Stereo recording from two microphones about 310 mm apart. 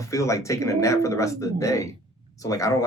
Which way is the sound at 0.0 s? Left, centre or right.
Centre.